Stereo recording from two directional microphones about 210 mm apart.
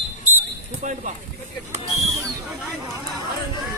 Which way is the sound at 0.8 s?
35° right (ahead or behind).